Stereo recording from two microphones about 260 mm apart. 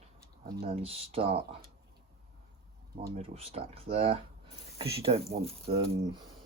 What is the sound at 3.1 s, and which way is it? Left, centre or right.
Speech, right.